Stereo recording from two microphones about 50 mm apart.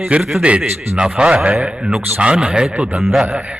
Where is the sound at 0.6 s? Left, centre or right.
Right.